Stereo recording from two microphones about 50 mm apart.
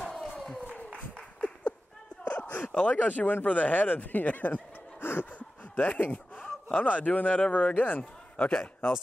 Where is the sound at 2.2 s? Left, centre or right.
Left.